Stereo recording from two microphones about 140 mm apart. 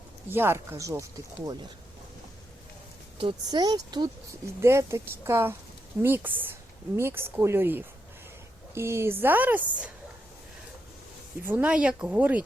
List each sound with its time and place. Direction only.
0.3 s speech: 15° right (ahead or behind)
3.2 s speech: 35° right (ahead or behind); by 9.6 s 15° right (ahead or behind)
11.4 s speech: 10° right (ahead or behind)